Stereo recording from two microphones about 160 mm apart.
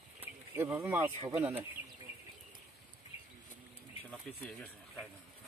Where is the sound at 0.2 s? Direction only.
10° right (ahead or behind).